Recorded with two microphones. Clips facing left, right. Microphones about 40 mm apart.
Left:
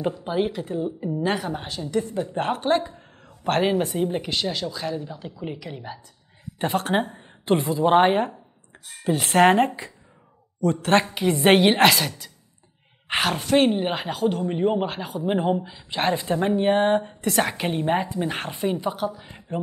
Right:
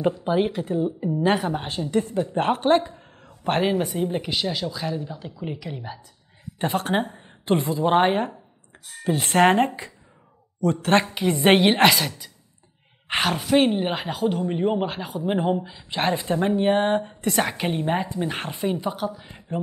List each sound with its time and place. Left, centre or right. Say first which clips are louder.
0.2 s speech: right 2 dB; centre
2.9 s a sound: right 1 dB; centre
3.6 s speech: left 1 dB; centre